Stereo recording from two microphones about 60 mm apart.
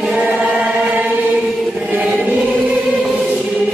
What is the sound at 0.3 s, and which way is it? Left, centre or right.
Chant, right.